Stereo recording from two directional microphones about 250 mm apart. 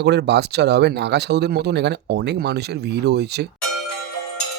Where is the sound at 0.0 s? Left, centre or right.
Right.